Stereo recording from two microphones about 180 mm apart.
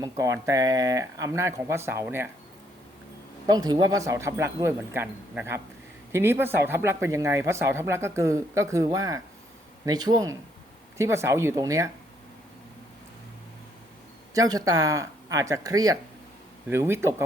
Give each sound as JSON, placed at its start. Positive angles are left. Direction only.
{"t": 0.0, "sound": "speech", "side_deg": -15}
{"t": 3.4, "sound": "speech", "side_deg": -20}
{"t": 14.3, "sound": "speech", "side_deg": -20}